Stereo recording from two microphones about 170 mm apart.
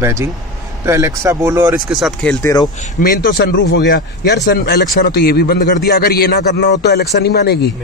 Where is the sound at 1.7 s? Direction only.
Centre (ahead or behind).